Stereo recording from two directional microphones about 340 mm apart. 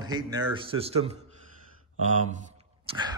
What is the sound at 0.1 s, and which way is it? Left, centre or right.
Speech, centre.